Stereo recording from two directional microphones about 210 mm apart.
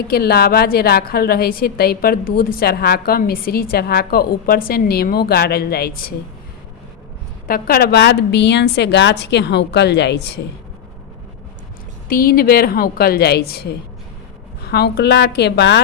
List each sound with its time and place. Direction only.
0.1 s a woman's voice: 45° left (ahead or behind)
7.4 s a woman's voice: 45° left (ahead or behind)
12.0 s a woman's voice: 45° left (ahead or behind)